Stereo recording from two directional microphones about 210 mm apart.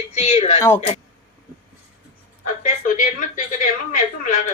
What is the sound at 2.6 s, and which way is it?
A woman's voice, 40° left (ahead or behind).